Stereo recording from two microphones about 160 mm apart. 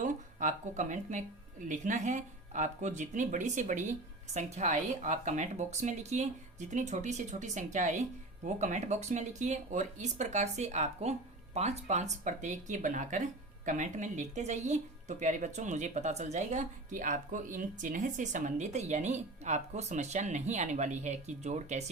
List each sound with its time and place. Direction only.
0.0 s speech: 50° right (ahead or behind)